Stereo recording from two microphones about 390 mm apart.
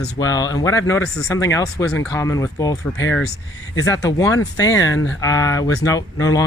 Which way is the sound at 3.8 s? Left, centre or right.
Centre.